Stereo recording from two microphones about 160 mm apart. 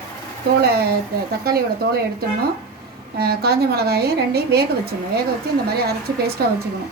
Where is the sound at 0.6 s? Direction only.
80° right.